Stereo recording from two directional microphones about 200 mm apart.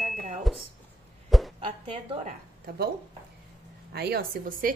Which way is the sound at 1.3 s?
Centre (ahead or behind).